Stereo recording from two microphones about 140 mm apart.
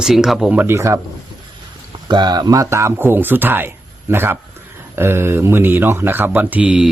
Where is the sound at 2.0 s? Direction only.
30° right (ahead or behind).